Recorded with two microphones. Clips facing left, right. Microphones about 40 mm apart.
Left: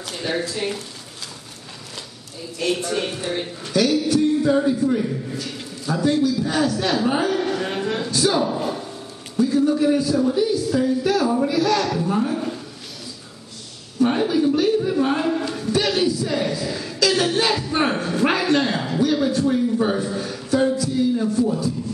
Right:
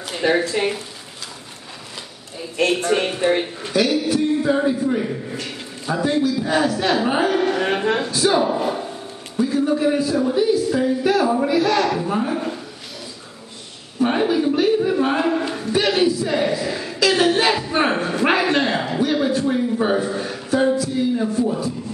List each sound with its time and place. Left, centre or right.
0.1 s speech: right
2.8 s speech: right
3.7 s a man's voice: centre
5.0 s a man's voice: right
7.6 s speech: right
8.1 s a man's voice: centre
13.9 s a sound: centre